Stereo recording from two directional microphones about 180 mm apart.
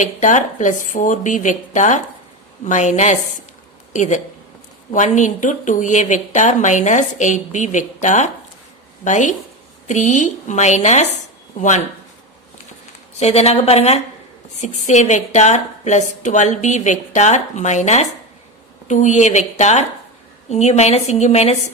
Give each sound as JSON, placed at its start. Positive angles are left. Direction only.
{"t": 0.0, "sound": "a woman's voice", "side_deg": 45}
{"t": 13.1, "sound": "a woman's voice", "side_deg": 35}